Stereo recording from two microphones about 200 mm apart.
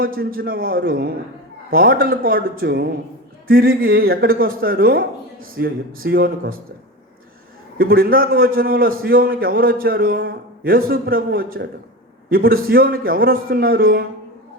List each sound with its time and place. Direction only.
0.0 s a man's voice: 45° right (ahead or behind)
7.8 s a man's voice: 45° right (ahead or behind)